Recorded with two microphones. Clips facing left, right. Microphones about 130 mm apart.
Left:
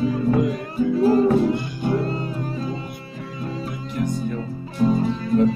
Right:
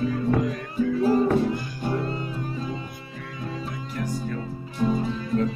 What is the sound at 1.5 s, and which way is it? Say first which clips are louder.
Music: left 5 dB; 25° left (ahead or behind).